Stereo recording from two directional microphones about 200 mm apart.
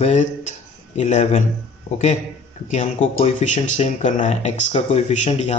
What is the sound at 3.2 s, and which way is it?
Speech, 35° left (ahead or behind).